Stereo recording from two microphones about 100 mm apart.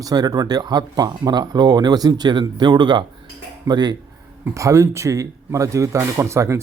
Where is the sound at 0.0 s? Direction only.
40° right (ahead or behind).